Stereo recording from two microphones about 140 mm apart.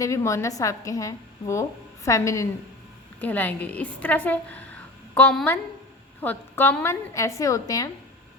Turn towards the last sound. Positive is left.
turn(degrees=25)  # may be behind; listen again after turning